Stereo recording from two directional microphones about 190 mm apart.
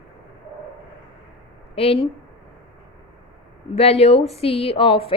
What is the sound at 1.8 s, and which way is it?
Speech, 30° left (ahead or behind).